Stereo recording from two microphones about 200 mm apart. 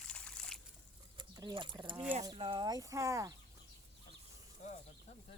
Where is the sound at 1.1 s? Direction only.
20° right (ahead or behind).